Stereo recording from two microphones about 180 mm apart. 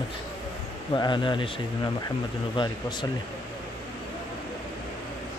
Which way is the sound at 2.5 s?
25° left (ahead or behind).